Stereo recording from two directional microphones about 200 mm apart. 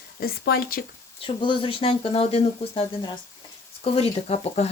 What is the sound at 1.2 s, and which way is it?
Speech, 25° left (ahead or behind).